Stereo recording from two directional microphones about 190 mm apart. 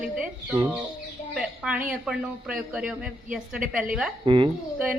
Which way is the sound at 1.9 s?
5° right (ahead or behind).